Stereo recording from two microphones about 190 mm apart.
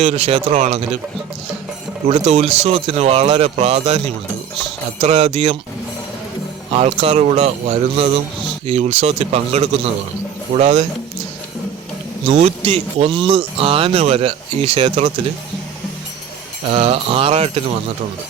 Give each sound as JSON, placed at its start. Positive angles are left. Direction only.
{"t": 0.0, "sound": "speech", "side_deg": -30}
{"t": 2.0, "sound": "speech", "side_deg": -30}
{"t": 6.7, "sound": "speech", "side_deg": -30}
{"t": 12.3, "sound": "speech", "side_deg": -35}
{"t": 16.6, "sound": "mantra", "side_deg": -30}